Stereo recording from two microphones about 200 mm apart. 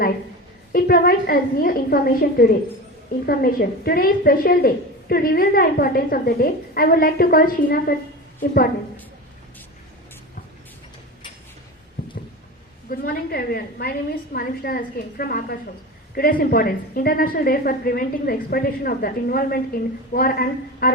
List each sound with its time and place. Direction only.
0.7 s a woman's voice: 50° left (ahead or behind)
12.9 s a woman's voice: 50° left (ahead or behind)